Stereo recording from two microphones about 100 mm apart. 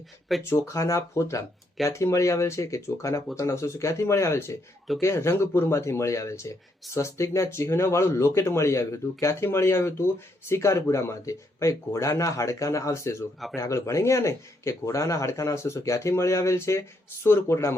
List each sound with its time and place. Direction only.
0.3 s speech: centre (ahead or behind)
0.7 s speech: 30° left (ahead or behind)